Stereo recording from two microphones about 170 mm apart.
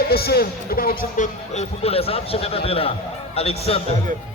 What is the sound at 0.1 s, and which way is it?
A man's voice, 65° left (ahead or behind).